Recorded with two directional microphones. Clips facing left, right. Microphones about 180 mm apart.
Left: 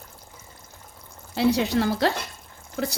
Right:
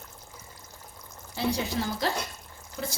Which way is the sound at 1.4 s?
70° left (ahead or behind).